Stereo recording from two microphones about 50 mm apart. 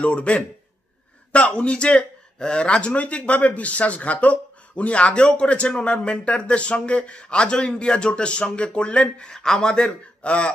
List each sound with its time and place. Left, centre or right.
0.0 s speech: left